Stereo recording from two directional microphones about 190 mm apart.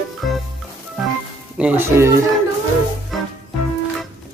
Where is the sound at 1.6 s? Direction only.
10° right (ahead or behind).